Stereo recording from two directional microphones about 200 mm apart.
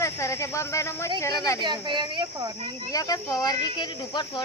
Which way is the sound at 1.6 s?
20° right (ahead or behind).